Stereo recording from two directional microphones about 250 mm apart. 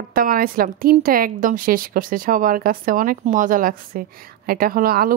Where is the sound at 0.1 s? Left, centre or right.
Right.